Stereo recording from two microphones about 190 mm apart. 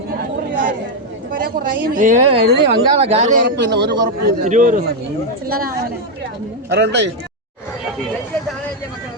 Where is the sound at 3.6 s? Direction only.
60° right (ahead or behind).